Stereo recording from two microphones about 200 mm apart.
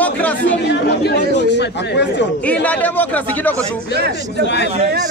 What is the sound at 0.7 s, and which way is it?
Speech, 55° left (ahead or behind).